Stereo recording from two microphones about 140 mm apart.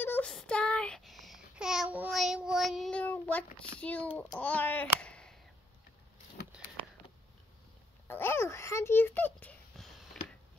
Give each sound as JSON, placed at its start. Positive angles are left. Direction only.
{"t": 0.0, "sound": "a sound", "side_deg": 15}
{"t": 0.3, "sound": "child singing", "side_deg": 5}
{"t": 3.8, "sound": "a child's voice", "side_deg": 10}
{"t": 8.1, "sound": "a child's voice", "side_deg": 15}